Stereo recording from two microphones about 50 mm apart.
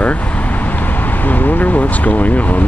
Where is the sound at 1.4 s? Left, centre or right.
Left.